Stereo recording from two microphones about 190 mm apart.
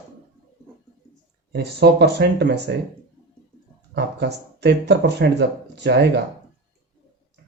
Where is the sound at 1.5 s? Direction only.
60° right (ahead or behind).